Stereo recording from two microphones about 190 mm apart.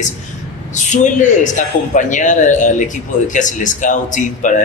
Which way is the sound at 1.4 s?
40° left (ahead or behind).